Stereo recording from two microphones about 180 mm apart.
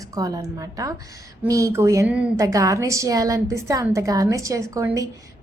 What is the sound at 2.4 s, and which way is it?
A woman's voice, 20° right (ahead or behind).